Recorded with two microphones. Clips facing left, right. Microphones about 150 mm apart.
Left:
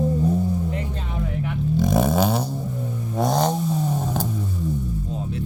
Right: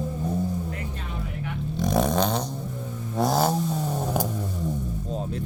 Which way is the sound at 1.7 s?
Centre (ahead or behind).